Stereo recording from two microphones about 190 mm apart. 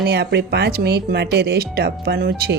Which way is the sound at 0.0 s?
60° right (ahead or behind).